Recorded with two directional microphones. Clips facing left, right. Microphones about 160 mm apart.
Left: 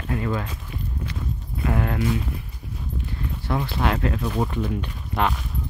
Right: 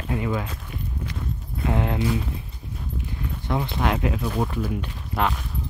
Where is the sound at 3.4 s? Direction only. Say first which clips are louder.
Even; 15° right (ahead or behind).